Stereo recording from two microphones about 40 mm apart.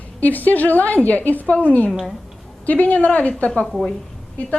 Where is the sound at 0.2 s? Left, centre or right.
Left.